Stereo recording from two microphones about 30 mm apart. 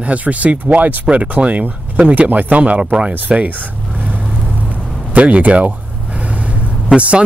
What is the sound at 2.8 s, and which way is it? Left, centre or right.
Speech, right.